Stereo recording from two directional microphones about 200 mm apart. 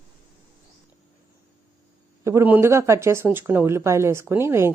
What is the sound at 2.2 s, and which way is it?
Speech, 15° right (ahead or behind).